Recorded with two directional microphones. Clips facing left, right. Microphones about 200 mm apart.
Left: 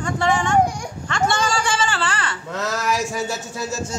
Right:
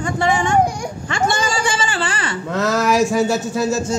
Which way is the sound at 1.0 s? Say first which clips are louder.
Right 1 dB; 10° right (ahead or behind).